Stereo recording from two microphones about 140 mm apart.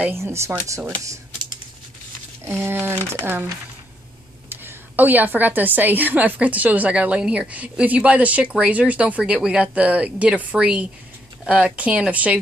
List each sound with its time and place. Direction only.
0.0 s speech: 20° right (ahead or behind)
2.6 s a woman's voice: 15° right (ahead or behind)